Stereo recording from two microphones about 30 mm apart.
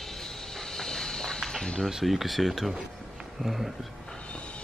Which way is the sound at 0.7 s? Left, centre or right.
Centre.